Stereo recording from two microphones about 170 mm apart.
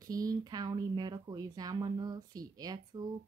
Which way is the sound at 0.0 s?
20° right (ahead or behind).